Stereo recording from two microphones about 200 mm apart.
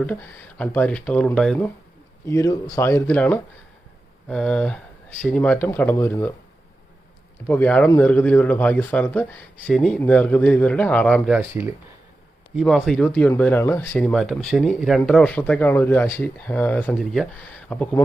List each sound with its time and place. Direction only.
0.0 s speech: 10° left (ahead or behind)
7.4 s speech: 10° left (ahead or behind)
11.3 s speech: 10° right (ahead or behind); by 18.0 s 5° left (ahead or behind)